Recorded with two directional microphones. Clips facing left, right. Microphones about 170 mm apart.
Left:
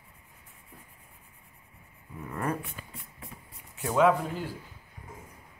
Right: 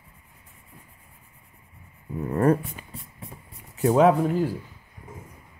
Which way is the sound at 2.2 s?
40° right (ahead or behind).